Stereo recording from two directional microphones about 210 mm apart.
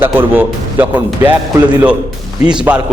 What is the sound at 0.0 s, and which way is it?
A man's voice, 10° right (ahead or behind).